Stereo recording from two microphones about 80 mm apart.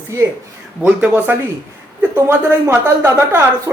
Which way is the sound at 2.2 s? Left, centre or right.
Right.